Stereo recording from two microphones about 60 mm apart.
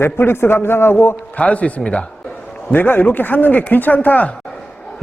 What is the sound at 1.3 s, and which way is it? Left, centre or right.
Speech, left.